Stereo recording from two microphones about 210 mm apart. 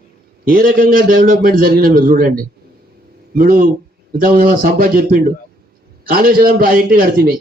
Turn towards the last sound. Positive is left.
turn(degrees=-45)  # may be behind; listen again after turning